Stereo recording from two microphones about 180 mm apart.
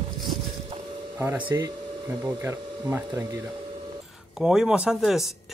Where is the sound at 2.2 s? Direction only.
15° right (ahead or behind).